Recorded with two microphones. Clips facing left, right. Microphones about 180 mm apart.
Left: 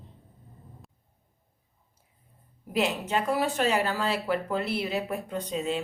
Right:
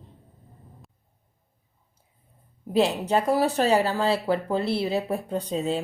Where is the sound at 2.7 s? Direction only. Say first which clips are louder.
Right 5 dB; 35° right (ahead or behind).